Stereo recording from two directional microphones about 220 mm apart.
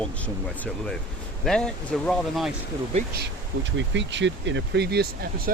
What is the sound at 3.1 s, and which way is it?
Speech, 55° right (ahead or behind).